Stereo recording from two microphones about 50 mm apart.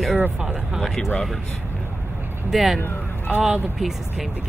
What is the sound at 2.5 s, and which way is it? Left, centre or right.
Speech, centre.